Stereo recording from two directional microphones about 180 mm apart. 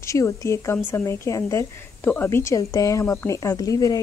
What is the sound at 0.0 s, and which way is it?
A woman's voice, 15° left (ahead or behind).